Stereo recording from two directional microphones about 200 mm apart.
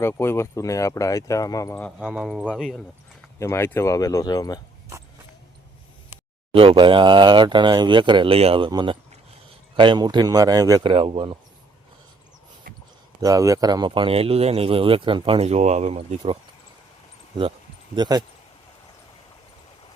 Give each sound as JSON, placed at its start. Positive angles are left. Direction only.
{"t": 0.0, "sound": "speech", "side_deg": 10}
{"t": 2.0, "sound": "speech", "side_deg": -5}
{"t": 3.3, "sound": "speech", "side_deg": 15}
{"t": 6.5, "sound": "speech", "side_deg": -25}
{"t": 13.2, "sound": "speech", "side_deg": -15}
{"t": 17.9, "sound": "speech", "side_deg": -20}